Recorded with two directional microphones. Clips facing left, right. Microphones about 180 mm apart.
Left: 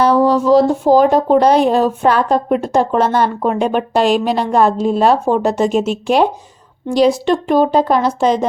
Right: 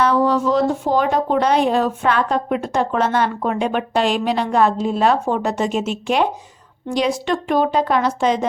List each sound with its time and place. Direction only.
0.0 s speech: 35° left (ahead or behind)